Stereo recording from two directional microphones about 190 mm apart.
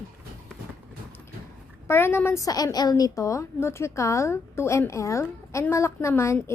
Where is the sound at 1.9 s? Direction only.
10° left (ahead or behind).